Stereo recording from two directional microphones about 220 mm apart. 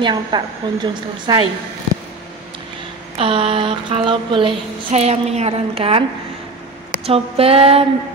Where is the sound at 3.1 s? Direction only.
25° right (ahead or behind).